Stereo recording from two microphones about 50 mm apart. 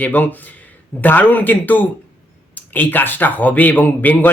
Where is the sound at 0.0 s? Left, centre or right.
Left.